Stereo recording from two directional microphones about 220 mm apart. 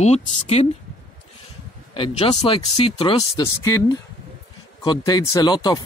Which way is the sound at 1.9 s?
25° left (ahead or behind).